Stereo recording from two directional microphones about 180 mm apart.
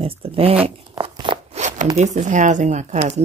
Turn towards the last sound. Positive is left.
turn(degrees=-35)  # may be behind; listen again after turning